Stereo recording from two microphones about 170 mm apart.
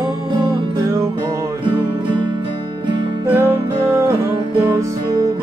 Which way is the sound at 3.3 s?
15° right (ahead or behind).